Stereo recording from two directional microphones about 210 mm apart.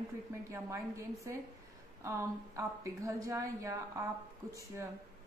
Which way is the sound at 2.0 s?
15° right (ahead or behind).